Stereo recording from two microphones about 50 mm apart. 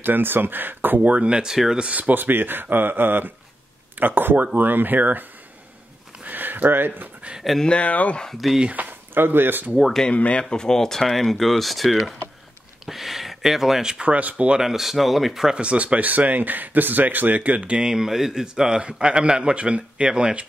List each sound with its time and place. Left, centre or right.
0.0 s speech: right
1.0 s speech: right
1.8 s speech: right
6.2 s speech: right
7.6 s speech: left
8.4 s speech: centre
8.7 s speech: right
9.8 s speech: centre
10.0 s speech: left
10.5 s speech: centre
14.1 s speech: right
14.6 s speech: centre
15.5 s speech: right
17.8 s a man's voice: centre